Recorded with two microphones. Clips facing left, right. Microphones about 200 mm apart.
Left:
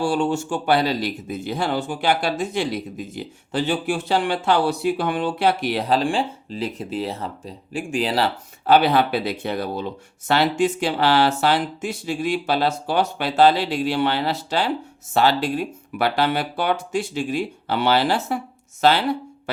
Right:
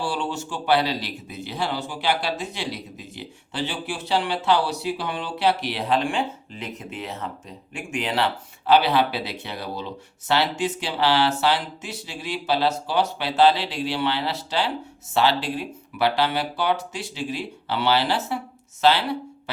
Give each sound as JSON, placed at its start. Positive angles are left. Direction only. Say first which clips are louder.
{"t": 0.0, "sound": "speech", "louder": "left 7 dB", "side_deg": 45}